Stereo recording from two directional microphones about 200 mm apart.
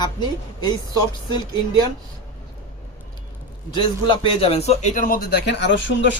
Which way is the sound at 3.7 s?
25° left (ahead or behind).